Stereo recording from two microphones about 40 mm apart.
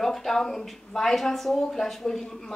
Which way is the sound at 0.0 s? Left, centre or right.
Centre.